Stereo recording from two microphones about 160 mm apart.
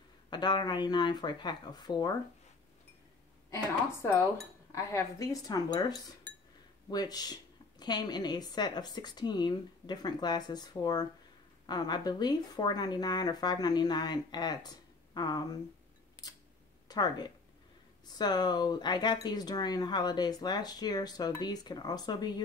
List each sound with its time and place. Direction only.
0.3 s speech: 25° left (ahead or behind)
3.4 s speech: 20° left (ahead or behind)
16.8 s speech: 25° left (ahead or behind)